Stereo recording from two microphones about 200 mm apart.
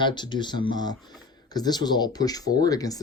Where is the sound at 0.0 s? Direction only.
20° left (ahead or behind).